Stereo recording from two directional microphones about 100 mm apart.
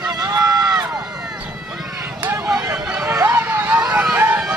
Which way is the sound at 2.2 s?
20° right (ahead or behind).